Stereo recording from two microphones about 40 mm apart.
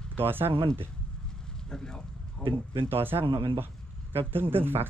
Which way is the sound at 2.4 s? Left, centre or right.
Left.